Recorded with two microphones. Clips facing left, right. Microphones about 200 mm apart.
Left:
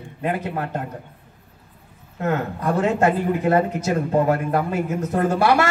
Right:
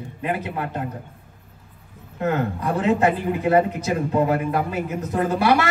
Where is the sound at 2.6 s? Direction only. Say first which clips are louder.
Left 1 dB; 45° left (ahead or behind).